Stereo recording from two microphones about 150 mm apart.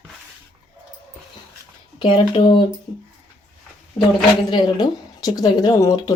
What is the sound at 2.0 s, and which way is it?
Speech, 35° left (ahead or behind).